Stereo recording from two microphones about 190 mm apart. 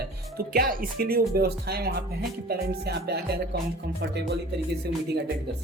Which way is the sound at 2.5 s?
55° right (ahead or behind).